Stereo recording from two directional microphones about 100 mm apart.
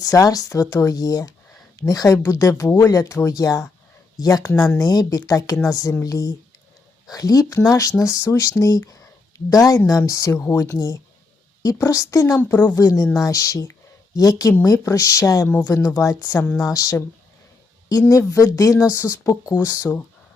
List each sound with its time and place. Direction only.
0.0 s speech: 35° left (ahead or behind)
10.8 s speech: 40° left (ahead or behind)
12.4 s speech: 20° left (ahead or behind)
12.7 s speech: 35° left (ahead or behind)
15.7 s speech: 25° left (ahead or behind)
18.1 s speech: 35° left (ahead or behind)